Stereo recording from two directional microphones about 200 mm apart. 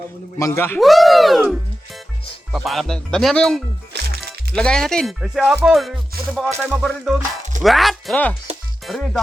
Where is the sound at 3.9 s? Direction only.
55° right (ahead or behind).